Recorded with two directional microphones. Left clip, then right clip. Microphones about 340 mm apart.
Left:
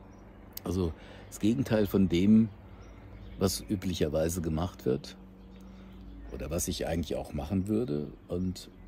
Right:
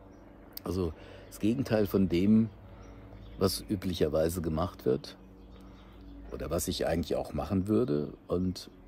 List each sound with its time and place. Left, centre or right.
0.7 s speech: centre
6.3 s speech: centre